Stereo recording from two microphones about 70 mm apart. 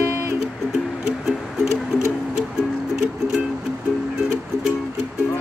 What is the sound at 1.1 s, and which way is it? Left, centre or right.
Music, centre.